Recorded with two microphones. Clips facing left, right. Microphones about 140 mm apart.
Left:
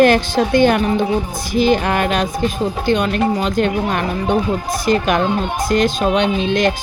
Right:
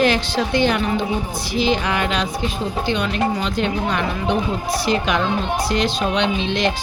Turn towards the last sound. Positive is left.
turn(degrees=50)  # may be behind; listen again after turning